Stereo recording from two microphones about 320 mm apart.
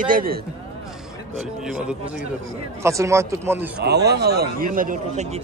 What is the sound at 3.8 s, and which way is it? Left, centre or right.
A man's voice, right.